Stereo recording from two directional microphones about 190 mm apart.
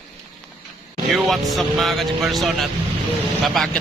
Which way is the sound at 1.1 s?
Centre (ahead or behind).